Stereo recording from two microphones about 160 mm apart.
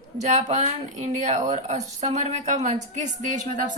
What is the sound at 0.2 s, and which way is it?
Speech, 45° right (ahead or behind).